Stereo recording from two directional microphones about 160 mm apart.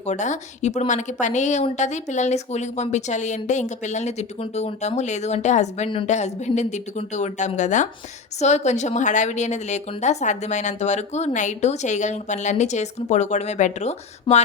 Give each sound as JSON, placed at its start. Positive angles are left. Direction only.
{"t": 0.0, "sound": "a woman's voice", "side_deg": 45}